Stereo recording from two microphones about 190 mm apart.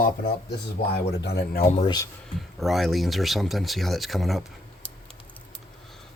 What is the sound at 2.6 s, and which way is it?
Speech, centre (ahead or behind).